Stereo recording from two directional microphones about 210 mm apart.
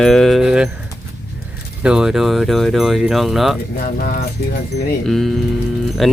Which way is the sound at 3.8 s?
45° left (ahead or behind).